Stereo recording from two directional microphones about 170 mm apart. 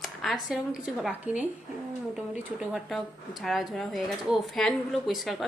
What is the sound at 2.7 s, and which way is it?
Speech, centre (ahead or behind).